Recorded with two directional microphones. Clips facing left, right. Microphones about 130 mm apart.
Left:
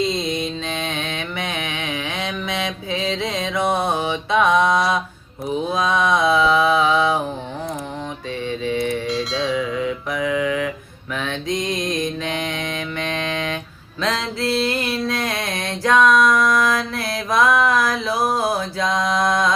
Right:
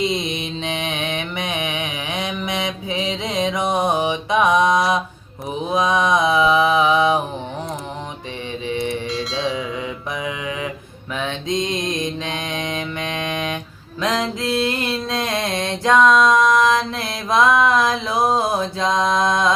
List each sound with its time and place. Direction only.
0.0 s mantra: 20° right (ahead or behind)
8.6 s music: 20° right (ahead or behind)
9.0 s music: centre (ahead or behind)
9.7 s mantra: 20° right (ahead or behind)
14.0 s a sound: 15° right (ahead or behind)